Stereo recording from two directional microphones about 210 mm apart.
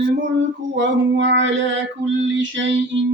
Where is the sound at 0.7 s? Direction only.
60° right (ahead or behind).